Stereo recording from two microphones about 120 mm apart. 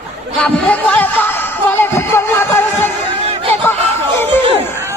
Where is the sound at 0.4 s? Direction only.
15° left (ahead or behind).